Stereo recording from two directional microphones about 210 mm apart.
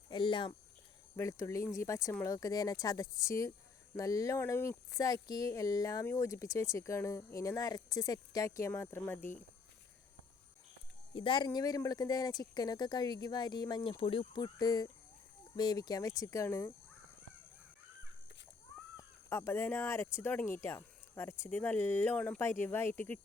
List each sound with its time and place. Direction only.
0.1 s speech: 20° left (ahead or behind)
11.1 s speech: 25° left (ahead or behind)
18.9 s speech: 10° left (ahead or behind)